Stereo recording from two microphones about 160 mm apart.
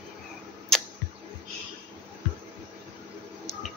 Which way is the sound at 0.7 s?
5° left (ahead or behind).